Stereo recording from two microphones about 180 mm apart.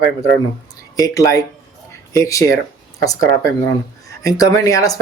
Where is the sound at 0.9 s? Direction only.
20° left (ahead or behind).